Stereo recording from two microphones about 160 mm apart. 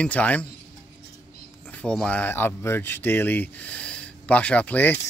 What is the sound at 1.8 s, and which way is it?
Speech, 5° left (ahead or behind).